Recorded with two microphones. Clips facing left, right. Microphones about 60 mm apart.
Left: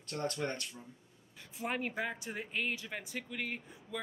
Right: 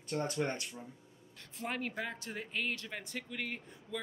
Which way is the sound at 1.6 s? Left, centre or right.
Centre.